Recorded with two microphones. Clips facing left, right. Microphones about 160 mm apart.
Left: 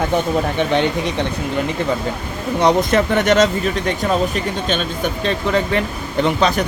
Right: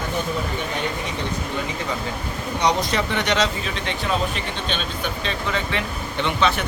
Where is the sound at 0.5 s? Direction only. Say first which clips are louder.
Left 9 dB; 75° left (ahead or behind).